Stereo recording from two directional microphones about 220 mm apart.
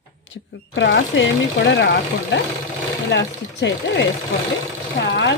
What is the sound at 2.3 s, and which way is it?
Speech, 55° left (ahead or behind).